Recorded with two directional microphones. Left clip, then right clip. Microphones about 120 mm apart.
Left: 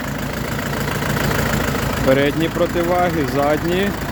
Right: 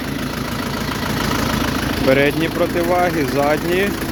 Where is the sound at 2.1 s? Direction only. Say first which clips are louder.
Right 1 dB; 40° left (ahead or behind).